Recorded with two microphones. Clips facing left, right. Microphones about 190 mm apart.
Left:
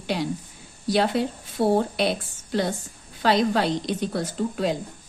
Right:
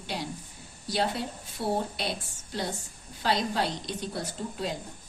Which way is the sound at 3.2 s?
80° left.